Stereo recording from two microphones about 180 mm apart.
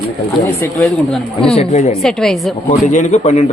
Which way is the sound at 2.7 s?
40° left (ahead or behind).